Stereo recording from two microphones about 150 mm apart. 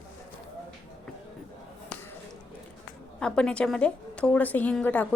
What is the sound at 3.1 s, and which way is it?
A woman's voice, 5° left (ahead or behind).